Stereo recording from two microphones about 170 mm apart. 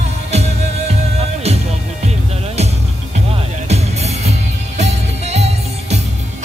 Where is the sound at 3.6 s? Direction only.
40° right (ahead or behind).